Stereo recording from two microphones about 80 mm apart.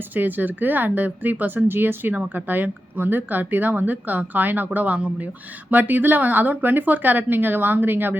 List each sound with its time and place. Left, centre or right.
0.1 s speech: right